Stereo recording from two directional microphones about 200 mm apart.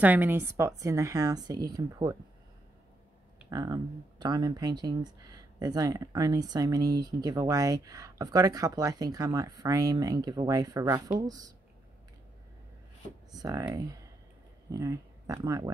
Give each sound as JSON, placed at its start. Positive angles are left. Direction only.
{"t": 0.0, "sound": "speech", "side_deg": -10}
{"t": 3.4, "sound": "speech", "side_deg": -20}
{"t": 13.3, "sound": "speech", "side_deg": -20}